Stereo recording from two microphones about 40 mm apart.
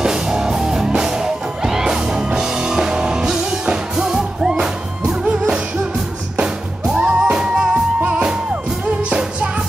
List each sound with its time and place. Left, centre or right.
0.0 s music: centre